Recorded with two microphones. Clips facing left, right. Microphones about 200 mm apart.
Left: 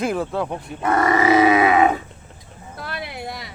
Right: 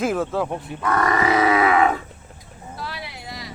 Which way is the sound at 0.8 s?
25° left (ahead or behind).